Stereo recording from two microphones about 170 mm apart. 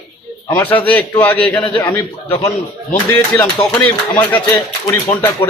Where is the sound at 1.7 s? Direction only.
30° left (ahead or behind).